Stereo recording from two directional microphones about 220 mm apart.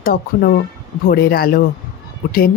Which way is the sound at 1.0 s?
45° left (ahead or behind).